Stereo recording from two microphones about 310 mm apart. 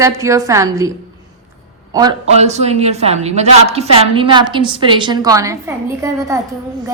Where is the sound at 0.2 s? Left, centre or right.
Centre.